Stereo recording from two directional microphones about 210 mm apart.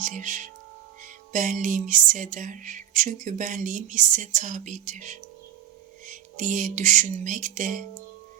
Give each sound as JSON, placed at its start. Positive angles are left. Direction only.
{"t": 0.0, "sound": "music", "side_deg": -35}